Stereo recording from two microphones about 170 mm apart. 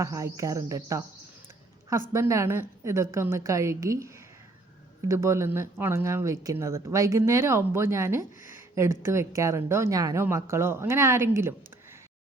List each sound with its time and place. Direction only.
0.0 s speech: 20° right (ahead or behind)